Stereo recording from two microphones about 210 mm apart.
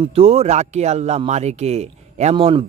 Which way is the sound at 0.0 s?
30° right (ahead or behind).